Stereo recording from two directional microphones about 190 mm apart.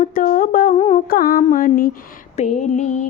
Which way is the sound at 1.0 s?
50° left (ahead or behind).